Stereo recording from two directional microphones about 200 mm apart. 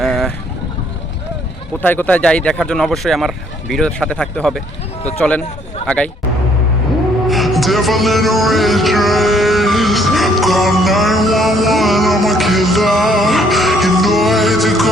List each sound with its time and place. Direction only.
0.0 s vehicle: centre (ahead or behind)
1.8 s speech: 10° left (ahead or behind)
7.3 s a sound: centre (ahead or behind)